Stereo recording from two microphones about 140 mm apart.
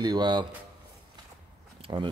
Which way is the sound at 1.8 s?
35° right (ahead or behind).